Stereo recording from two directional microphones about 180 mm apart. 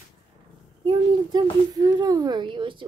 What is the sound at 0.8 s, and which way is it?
Speech, 20° right (ahead or behind).